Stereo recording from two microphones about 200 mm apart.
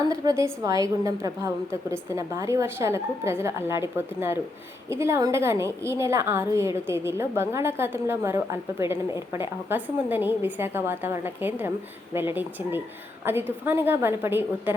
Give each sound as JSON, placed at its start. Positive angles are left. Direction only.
{"t": 0.1, "sound": "a woman's voice", "side_deg": -15}